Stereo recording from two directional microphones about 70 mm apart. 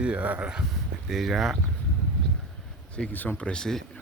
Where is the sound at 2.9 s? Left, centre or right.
Left.